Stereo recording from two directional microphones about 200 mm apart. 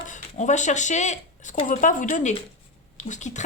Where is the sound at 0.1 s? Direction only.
35° left (ahead or behind).